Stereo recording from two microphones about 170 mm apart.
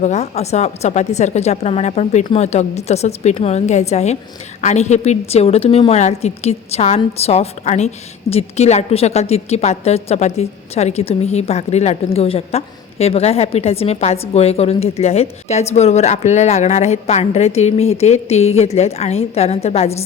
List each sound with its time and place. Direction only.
0.0 s a woman's voice: 40° left (ahead or behind)